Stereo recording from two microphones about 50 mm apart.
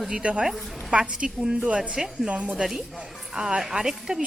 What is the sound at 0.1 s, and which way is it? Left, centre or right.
A woman's voice, right.